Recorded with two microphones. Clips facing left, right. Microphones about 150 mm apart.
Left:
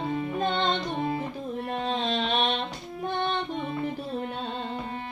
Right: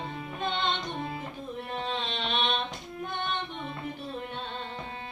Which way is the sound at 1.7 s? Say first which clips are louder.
Left 5 dB; 40° left (ahead or behind).